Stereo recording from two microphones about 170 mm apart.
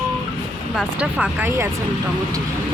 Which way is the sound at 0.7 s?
5° right (ahead or behind).